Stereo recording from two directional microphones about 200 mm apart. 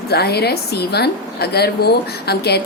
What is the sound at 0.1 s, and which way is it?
Speech, 55° left (ahead or behind).